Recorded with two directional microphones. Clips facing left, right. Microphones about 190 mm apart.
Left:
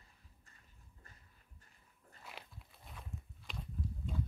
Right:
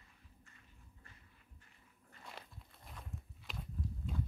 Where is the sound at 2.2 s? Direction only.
Centre (ahead or behind).